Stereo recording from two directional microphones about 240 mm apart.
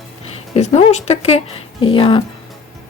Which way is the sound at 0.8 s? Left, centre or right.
Left.